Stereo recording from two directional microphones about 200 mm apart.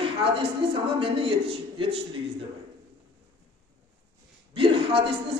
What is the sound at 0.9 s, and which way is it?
A man's voice, 25° right (ahead or behind).